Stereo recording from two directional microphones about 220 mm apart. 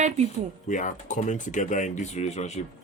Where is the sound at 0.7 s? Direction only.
35° left (ahead or behind).